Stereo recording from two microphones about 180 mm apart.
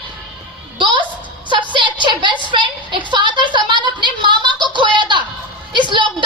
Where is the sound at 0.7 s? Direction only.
25° right (ahead or behind).